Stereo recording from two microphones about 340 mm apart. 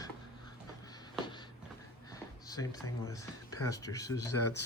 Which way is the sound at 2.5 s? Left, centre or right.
Centre.